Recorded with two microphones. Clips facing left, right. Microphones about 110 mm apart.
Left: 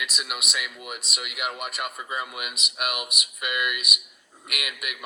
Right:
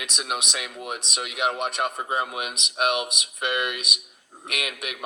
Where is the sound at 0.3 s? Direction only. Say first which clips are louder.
Right 3 dB; 35° right (ahead or behind).